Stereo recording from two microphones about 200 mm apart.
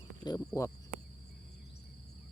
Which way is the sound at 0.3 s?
15° left (ahead or behind).